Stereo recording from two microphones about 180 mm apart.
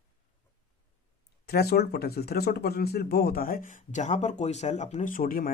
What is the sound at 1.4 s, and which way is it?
Speech, 60° left (ahead or behind).